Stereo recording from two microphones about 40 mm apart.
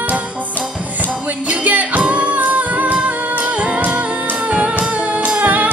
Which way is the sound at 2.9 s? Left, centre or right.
Right.